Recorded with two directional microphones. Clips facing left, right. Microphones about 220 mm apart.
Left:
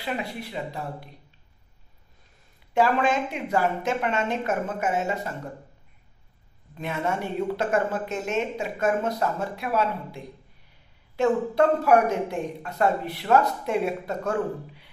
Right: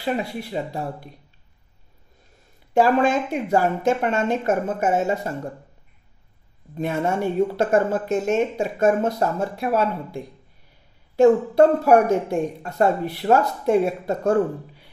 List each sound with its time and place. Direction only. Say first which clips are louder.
0.0 s speech: right 5 dB; 40° right (ahead or behind)
2.7 s speech: right 4 dB; 45° right (ahead or behind)
6.8 s speech: right 6 dB; 45° right (ahead or behind)